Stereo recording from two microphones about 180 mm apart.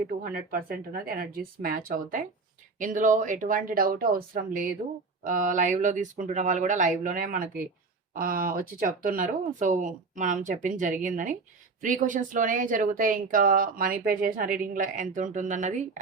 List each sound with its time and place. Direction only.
0.2 s speech: 50° right (ahead or behind)